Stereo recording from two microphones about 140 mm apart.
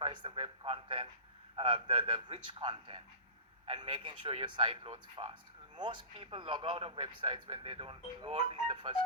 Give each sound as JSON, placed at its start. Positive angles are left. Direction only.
{"t": 0.0, "sound": "speech", "side_deg": -35}